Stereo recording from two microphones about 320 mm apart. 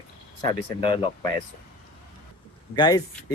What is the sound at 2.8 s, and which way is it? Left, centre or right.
Speech, centre.